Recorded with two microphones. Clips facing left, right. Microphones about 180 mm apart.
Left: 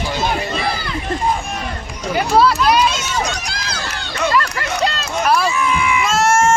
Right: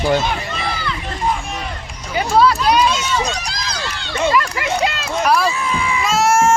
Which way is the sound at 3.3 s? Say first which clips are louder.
Right 1 dB; 35° right (ahead or behind).